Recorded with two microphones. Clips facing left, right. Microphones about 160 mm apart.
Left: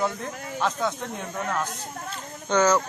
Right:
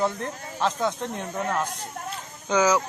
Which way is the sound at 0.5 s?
5° right (ahead or behind).